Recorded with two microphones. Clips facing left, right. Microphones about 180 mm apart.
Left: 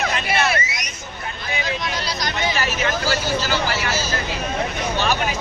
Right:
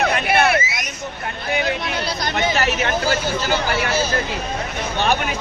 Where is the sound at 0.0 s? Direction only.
60° right (ahead or behind).